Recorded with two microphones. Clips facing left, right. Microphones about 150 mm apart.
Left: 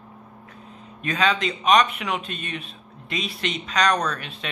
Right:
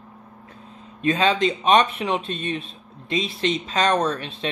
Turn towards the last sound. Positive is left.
turn(degrees=-30)  # may be behind; listen again after turning